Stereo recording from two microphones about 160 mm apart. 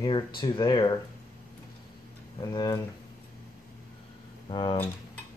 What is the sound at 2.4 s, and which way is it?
Speech, 25° left (ahead or behind).